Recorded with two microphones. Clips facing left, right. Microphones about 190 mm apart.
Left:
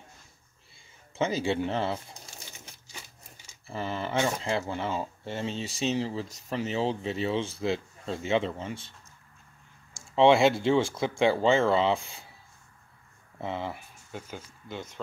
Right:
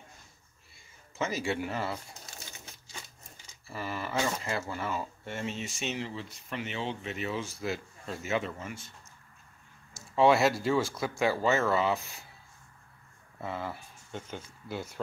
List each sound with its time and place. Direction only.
1.1 s speech: 30° left (ahead or behind)
3.6 s speech: 25° left (ahead or behind)
10.1 s speech: 25° left (ahead or behind)
13.4 s speech: 20° left (ahead or behind)
14.1 s speech: 10° left (ahead or behind)
14.7 s speech: 5° right (ahead or behind)